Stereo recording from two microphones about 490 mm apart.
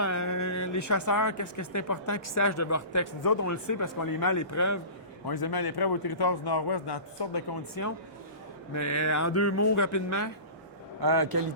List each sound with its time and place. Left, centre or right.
0.0 s speech: left
5.2 s speech: left
7.8 s speech: left
11.0 s a man's voice: right